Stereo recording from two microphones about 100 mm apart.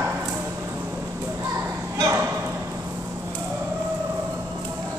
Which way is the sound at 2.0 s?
20° right (ahead or behind).